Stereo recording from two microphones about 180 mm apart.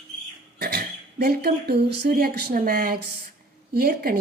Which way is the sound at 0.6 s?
60° right (ahead or behind).